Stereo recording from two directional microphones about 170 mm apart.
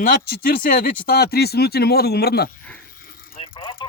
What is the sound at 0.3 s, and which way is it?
Speech, 60° left (ahead or behind).